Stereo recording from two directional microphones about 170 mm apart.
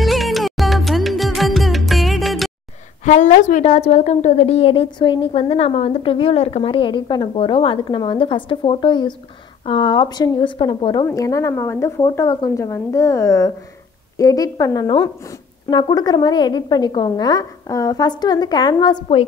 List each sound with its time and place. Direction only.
0.0 s music: centre (ahead or behind)
3.1 s a woman's voice: 45° left (ahead or behind); by 19.0 s 25° left (ahead or behind)